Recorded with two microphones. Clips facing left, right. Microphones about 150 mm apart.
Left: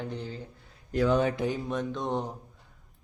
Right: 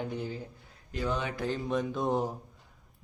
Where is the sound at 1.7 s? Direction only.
5° right (ahead or behind).